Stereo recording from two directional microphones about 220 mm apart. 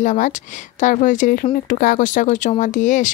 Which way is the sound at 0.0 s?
35° left (ahead or behind).